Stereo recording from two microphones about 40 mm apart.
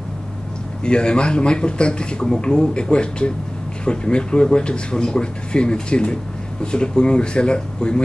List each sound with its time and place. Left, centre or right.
0.8 s speech: left